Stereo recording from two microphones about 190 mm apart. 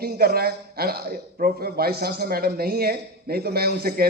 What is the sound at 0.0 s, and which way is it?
A man's voice, 55° right (ahead or behind).